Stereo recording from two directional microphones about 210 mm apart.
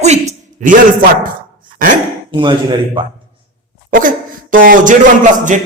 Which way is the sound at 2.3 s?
20° right (ahead or behind).